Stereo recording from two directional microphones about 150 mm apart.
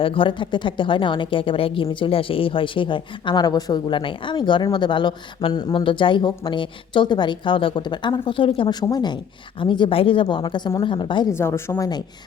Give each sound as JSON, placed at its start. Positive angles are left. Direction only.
{"t": 0.0, "sound": "a woman's voice", "side_deg": 35}
{"t": 11.3, "sound": "speech", "side_deg": 15}